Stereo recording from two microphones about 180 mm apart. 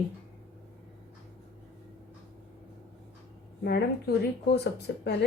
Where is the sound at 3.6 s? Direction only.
60° left (ahead or behind).